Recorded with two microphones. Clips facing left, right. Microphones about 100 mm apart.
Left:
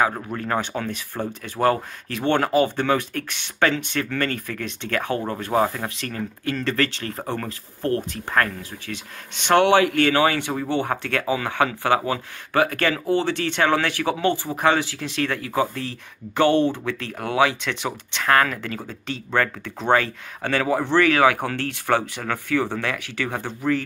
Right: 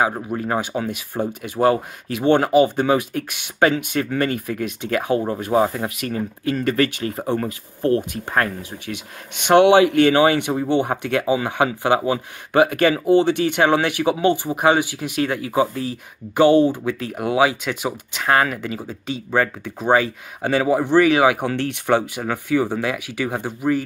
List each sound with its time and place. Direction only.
0.0 s speech: 15° right (ahead or behind)